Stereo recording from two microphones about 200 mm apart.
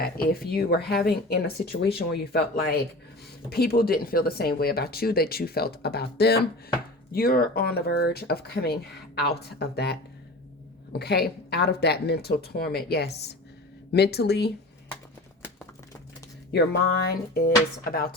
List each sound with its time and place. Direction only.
0.0 s speech: 50° left (ahead or behind)
16.5 s speech: 55° left (ahead or behind)